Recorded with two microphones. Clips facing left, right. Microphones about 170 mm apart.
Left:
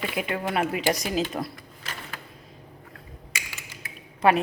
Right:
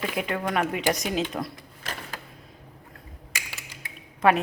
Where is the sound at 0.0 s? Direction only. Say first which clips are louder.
Even; 5° left (ahead or behind).